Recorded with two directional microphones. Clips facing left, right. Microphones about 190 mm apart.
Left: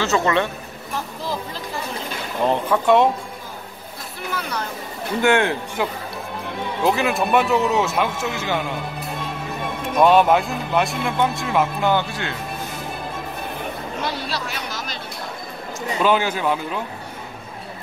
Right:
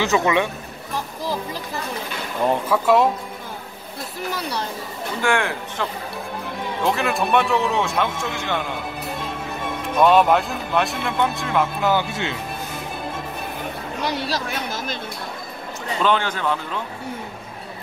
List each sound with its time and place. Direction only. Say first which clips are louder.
0.0 s speech: even; 15° right (ahead or behind)
2.7 s a man's voice: left 1 dB; 5° right (ahead or behind)
4.3 s speech: even; 35° right (ahead or behind)
5.2 s a man's voice: left 4 dB; 20° left (ahead or behind)
5.8 s a man's voice: left 2 dB; 10° left (ahead or behind)
9.9 s a man's voice: left 1 dB; centre (ahead or behind)
12.1 s speech: right 2 dB; 20° right (ahead or behind)
14.3 s a woman's voice: right 2 dB; 50° right (ahead or behind)
16.0 s speech: left 2 dB; 10° left (ahead or behind)